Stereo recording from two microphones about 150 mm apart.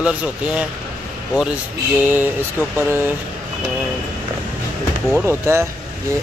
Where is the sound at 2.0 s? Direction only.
15° right (ahead or behind).